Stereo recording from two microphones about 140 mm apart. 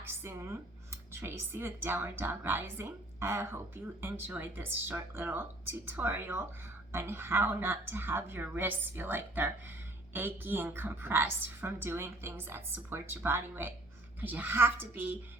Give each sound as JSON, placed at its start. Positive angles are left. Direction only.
{"t": 0.0, "sound": "a woman's voice", "side_deg": -15}